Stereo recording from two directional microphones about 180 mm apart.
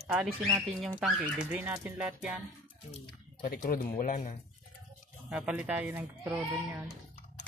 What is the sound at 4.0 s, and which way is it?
Speech, 45° left (ahead or behind).